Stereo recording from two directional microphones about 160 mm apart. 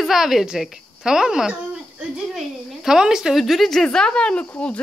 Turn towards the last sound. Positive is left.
turn(degrees=5)  # may be behind; listen again after turning